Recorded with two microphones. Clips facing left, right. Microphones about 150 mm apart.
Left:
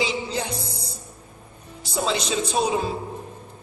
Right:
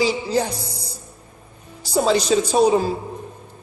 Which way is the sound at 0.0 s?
35° right (ahead or behind).